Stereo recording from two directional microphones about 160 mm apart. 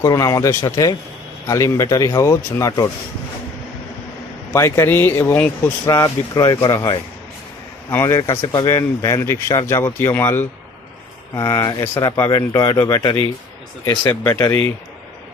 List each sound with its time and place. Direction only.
0.0 s speech: 20° left (ahead or behind)
4.5 s speech: 20° left (ahead or behind)